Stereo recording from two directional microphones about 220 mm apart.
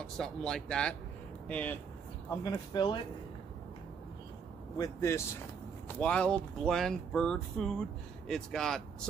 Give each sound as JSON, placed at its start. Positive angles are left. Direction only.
{"t": 0.0, "sound": "speech", "side_deg": 5}
{"t": 2.2, "sound": "speech", "side_deg": 15}
{"t": 4.7, "sound": "speech", "side_deg": 15}